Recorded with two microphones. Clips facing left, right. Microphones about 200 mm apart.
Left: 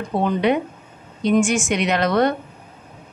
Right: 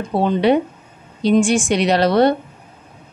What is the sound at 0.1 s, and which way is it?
A woman's voice, 30° right (ahead or behind).